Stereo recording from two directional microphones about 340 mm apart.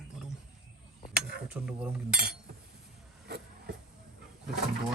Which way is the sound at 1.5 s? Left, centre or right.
Centre.